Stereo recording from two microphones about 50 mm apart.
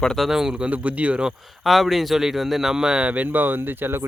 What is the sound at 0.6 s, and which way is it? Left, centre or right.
Speech, right.